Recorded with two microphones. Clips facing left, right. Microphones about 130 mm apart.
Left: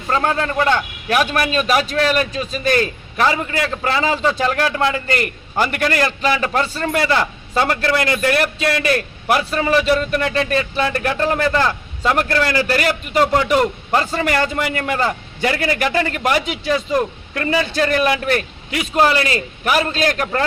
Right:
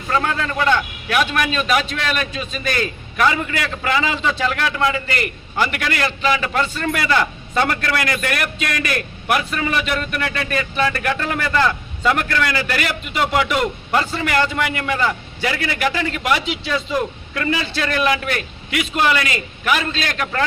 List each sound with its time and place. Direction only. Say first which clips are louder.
0.1 s a man's voice: left 2 dB; 35° left (ahead or behind)